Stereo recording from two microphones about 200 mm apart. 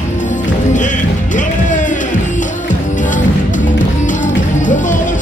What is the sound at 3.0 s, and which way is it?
Music, 40° left (ahead or behind).